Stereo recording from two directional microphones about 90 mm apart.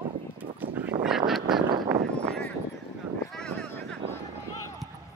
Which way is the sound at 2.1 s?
15° left (ahead or behind).